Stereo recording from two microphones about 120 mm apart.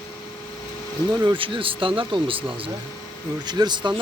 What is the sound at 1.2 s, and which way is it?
Speech, 45° right (ahead or behind).